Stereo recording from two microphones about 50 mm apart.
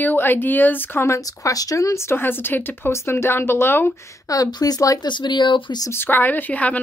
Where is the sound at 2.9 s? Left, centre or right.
Left.